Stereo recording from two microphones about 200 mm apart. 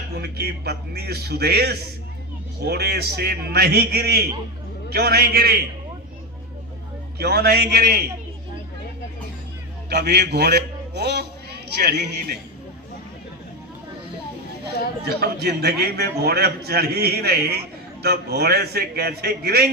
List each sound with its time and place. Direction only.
0.2 s a man's voice: 55° right (ahead or behind)
7.2 s a man's voice: 50° right (ahead or behind)
9.9 s a man's voice: 55° right (ahead or behind)
15.0 s a man's voice: 55° right (ahead or behind)